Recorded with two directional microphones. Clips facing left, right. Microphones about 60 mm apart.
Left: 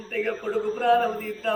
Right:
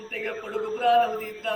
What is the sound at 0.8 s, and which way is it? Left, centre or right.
Mantra, centre.